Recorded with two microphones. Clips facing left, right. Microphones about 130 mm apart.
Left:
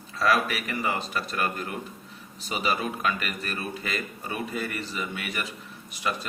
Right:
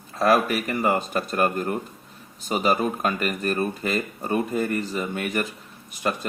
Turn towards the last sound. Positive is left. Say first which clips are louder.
# right 4 dB
turn(degrees=-50)  # may be behind; listen again after turning